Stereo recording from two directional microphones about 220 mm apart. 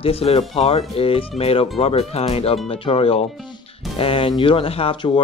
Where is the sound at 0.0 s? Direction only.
25° left (ahead or behind).